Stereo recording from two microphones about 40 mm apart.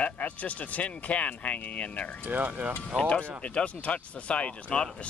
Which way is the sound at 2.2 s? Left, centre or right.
Right.